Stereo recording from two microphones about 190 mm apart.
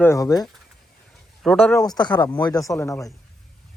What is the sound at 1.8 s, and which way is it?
Speech, 20° left (ahead or behind).